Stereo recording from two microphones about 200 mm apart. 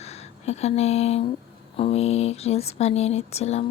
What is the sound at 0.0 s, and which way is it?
Speech, 30° left (ahead or behind).